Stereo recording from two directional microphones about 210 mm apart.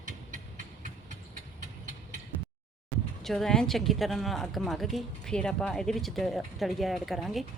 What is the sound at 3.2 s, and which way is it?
A woman's voice, centre (ahead or behind).